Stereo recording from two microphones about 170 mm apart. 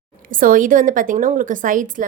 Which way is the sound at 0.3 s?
55° right (ahead or behind).